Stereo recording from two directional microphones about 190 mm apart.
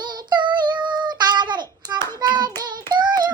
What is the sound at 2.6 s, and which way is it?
Child singing, 20° right (ahead or behind).